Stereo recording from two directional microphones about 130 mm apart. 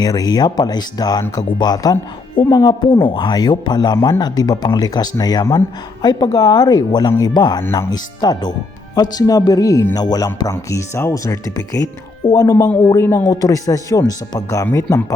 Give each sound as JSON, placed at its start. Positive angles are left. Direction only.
{"t": 0.0, "sound": "speech", "side_deg": 30}